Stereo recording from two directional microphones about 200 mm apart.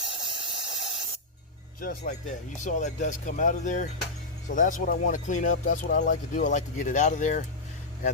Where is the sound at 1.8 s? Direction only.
45° left (ahead or behind).